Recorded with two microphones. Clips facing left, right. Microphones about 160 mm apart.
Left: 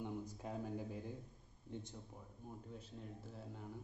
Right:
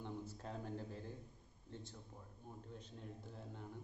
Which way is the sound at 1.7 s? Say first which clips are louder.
Left 4 dB; 20° left (ahead or behind).